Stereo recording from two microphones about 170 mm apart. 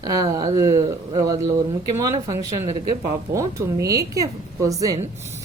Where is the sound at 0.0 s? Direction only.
20° right (ahead or behind).